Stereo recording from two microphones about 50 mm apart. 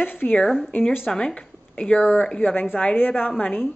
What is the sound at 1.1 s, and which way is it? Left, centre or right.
Speech, centre.